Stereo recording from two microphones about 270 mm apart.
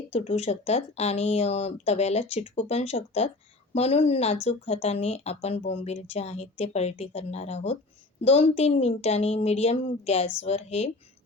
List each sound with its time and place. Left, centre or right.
0.1 s speech: left